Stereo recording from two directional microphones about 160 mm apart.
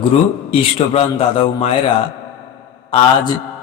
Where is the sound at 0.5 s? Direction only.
35° left (ahead or behind).